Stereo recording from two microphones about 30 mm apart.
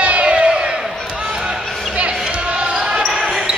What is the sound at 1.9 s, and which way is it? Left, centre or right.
Basketball bounce, right.